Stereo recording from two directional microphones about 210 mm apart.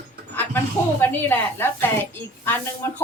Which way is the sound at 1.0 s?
10° left (ahead or behind).